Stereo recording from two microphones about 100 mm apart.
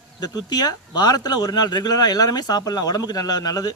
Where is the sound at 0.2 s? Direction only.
45° left (ahead or behind).